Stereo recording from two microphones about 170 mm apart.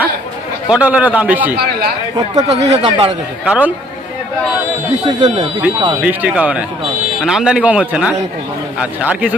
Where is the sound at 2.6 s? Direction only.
40° right (ahead or behind).